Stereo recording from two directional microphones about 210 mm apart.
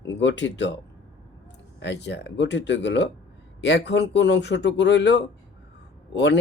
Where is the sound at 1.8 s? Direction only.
55° left (ahead or behind).